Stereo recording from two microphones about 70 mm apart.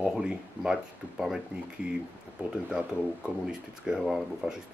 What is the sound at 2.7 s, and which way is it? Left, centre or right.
Speech, centre.